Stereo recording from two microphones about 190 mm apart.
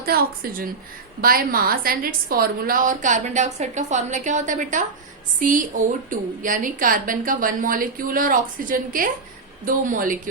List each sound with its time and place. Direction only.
0.0 s a woman's voice: 50° right (ahead or behind)